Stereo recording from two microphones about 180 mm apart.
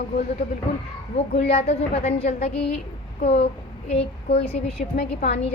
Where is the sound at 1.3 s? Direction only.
65° left (ahead or behind).